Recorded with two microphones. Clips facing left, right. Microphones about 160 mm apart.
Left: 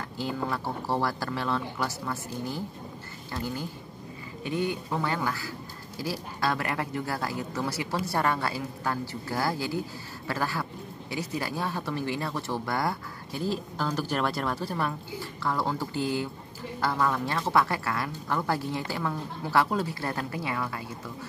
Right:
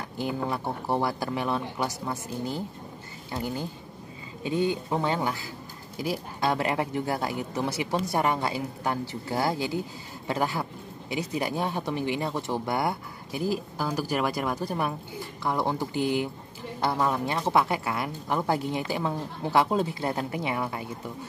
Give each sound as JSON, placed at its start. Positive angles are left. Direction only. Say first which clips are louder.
{"t": 0.2, "sound": "a woman's voice", "louder": "right 2 dB", "side_deg": -15}